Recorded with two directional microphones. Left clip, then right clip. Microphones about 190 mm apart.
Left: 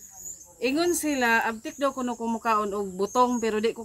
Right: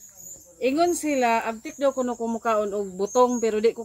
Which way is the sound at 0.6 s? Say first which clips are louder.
Right 3 dB; 15° left (ahead or behind).